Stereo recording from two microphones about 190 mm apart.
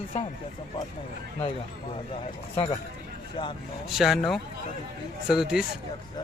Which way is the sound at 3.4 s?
30° left (ahead or behind).